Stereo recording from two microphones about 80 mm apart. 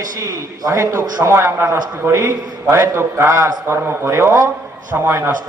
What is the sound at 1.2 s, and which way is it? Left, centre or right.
A man's voice, right.